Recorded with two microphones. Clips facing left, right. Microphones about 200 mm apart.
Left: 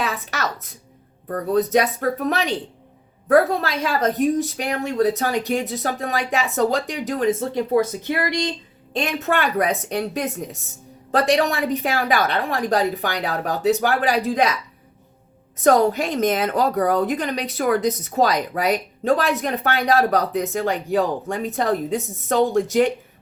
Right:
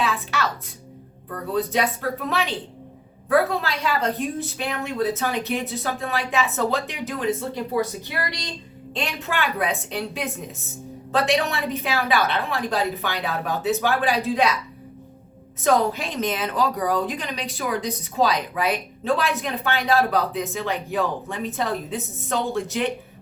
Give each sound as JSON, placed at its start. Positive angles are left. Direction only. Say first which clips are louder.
{"t": 0.0, "sound": "a sound", "louder": "right 1 dB", "side_deg": 40}
{"t": 1.3, "sound": "a woman's voice", "louder": "left 6 dB", "side_deg": 45}
{"t": 8.9, "sound": "a woman's voice", "louder": "left 6 dB", "side_deg": 45}
{"t": 15.6, "sound": "a woman's voice", "louder": "left 4 dB", "side_deg": 45}